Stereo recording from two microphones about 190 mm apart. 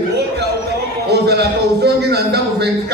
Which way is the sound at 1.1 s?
60° right (ahead or behind).